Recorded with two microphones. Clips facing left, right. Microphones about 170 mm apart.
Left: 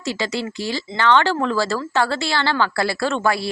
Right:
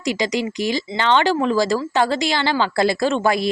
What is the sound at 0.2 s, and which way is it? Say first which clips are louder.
Speech: right 4 dB; 15° right (ahead or behind).